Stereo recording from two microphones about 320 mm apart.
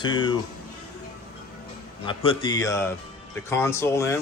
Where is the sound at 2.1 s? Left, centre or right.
Centre.